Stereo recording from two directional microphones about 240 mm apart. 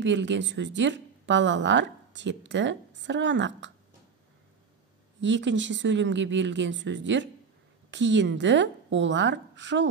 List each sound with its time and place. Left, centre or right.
0.0 s speech: right
5.2 s speech: right